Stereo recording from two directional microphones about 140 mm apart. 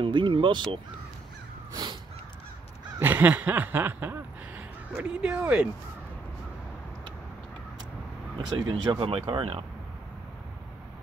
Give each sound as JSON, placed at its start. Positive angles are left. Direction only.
{"t": 0.0, "sound": "speech", "side_deg": -40}
{"t": 1.7, "sound": "crow", "side_deg": -25}
{"t": 3.0, "sound": "a sound", "side_deg": -15}
{"t": 8.5, "sound": "speech", "side_deg": -35}